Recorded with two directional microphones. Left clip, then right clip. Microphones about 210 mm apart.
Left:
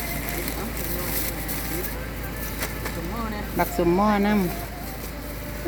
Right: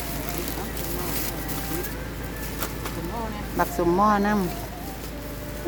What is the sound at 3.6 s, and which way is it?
Speech, centre (ahead or behind).